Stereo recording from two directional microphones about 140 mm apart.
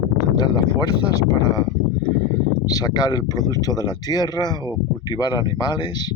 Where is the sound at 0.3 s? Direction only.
30° left (ahead or behind).